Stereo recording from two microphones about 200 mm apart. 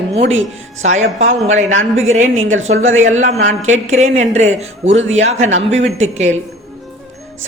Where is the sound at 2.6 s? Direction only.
75° right (ahead or behind).